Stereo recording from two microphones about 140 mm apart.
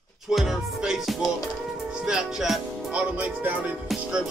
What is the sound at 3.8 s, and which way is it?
Music, 5° right (ahead or behind).